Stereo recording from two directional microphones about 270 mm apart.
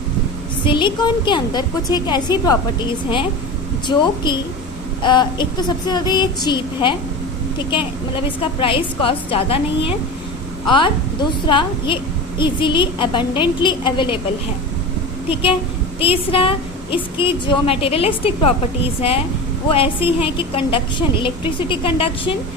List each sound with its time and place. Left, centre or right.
0.6 s a woman's voice: centre
3.8 s a woman's voice: centre
15.3 s a woman's voice: centre
19.7 s a woman's voice: centre